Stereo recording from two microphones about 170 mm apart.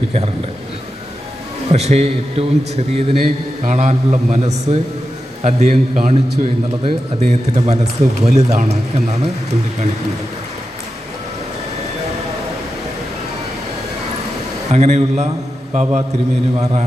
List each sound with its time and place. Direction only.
1.7 s a man's voice: 40° right (ahead or behind)
14.7 s speech: 40° right (ahead or behind)